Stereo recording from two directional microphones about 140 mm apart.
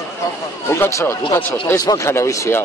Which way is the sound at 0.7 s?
20° left (ahead or behind).